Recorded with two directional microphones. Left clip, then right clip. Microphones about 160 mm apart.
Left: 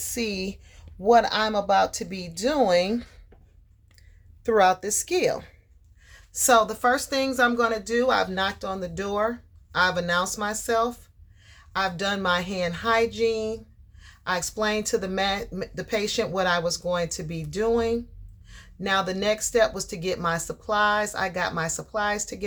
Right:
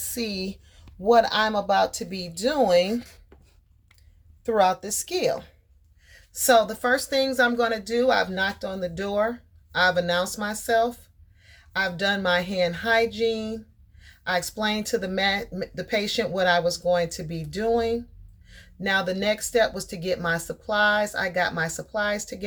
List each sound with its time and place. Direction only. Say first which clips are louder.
0.0 s a sound: left 1 dB; 25° left (ahead or behind)
1.0 s speech: even; 15° left (ahead or behind)
4.4 s a woman's voice: left 1 dB; 35° left (ahead or behind)